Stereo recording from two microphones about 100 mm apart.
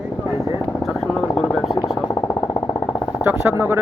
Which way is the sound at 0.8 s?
Centre (ahead or behind).